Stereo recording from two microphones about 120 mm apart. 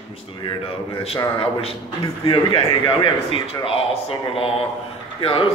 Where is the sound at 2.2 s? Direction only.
45° left (ahead or behind).